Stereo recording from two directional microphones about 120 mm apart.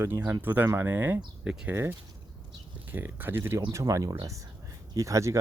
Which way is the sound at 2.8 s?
15° right (ahead or behind).